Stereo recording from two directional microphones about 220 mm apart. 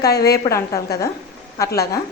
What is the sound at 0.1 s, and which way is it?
Speech, 45° left (ahead or behind).